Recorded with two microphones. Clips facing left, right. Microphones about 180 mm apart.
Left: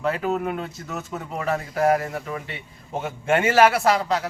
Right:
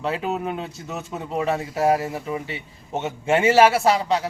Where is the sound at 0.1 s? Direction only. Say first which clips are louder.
Left 1 dB; 20° right (ahead or behind).